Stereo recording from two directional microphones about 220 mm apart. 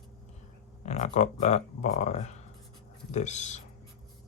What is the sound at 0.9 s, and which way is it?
Speech, 30° left (ahead or behind).